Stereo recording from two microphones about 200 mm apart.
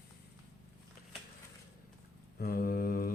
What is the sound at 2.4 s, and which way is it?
Speech, 45° left (ahead or behind).